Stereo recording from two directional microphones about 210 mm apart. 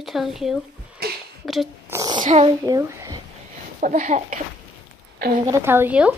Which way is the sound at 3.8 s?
35° right (ahead or behind).